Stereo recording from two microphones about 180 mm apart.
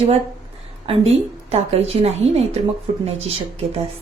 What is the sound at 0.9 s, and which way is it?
A woman's voice, 35° right (ahead or behind).